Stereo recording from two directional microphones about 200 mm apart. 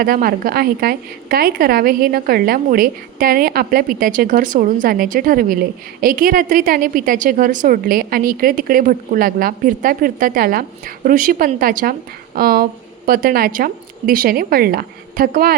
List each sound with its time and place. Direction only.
0.0 s a woman's voice: 45° right (ahead or behind)